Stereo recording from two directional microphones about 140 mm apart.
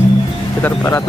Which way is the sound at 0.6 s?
15° left (ahead or behind).